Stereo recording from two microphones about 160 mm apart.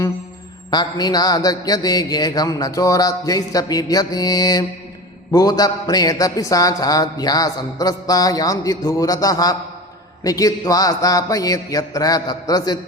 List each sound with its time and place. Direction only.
0.7 s a man's voice: 25° left (ahead or behind)